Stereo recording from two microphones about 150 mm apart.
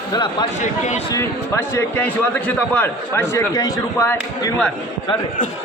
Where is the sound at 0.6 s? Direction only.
55° left (ahead or behind).